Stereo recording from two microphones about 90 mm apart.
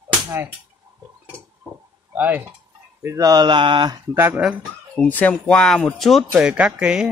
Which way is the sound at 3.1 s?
40° right (ahead or behind).